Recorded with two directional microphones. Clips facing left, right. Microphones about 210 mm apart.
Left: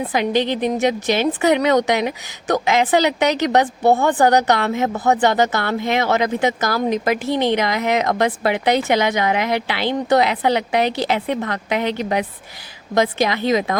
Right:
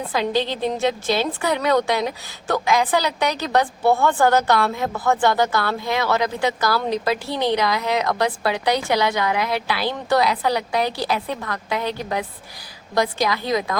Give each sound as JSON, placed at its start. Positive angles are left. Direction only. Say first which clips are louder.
{"t": 0.1, "sound": "a woman's voice", "louder": "left 2 dB", "side_deg": 20}